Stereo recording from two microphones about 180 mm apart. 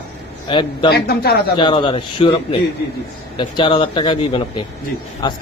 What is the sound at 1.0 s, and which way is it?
Speech, 60° left (ahead or behind).